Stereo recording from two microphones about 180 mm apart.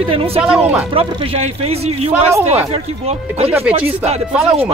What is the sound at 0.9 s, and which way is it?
A man's voice, 30° right (ahead or behind).